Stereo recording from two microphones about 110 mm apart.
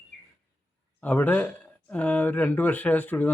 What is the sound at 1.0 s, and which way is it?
Speech, 15° left (ahead or behind).